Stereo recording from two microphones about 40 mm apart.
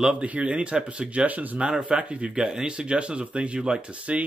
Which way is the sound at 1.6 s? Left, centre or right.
Right.